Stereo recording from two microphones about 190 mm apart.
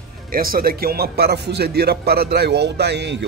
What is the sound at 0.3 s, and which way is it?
Speech, 50° right (ahead or behind).